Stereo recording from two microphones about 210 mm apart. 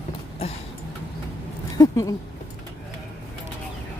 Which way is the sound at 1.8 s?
15° left (ahead or behind).